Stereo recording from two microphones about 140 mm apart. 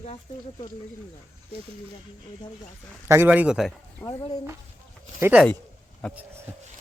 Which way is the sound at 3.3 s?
5° right (ahead or behind).